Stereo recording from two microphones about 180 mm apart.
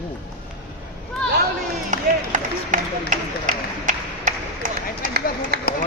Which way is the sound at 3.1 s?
45° right (ahead or behind).